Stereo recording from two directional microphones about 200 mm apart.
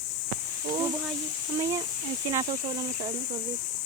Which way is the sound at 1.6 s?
15° right (ahead or behind).